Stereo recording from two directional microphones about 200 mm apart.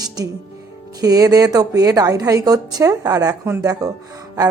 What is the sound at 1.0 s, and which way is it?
Speech, 20° right (ahead or behind).